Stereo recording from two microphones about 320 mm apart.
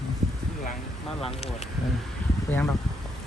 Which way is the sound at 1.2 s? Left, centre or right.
Centre.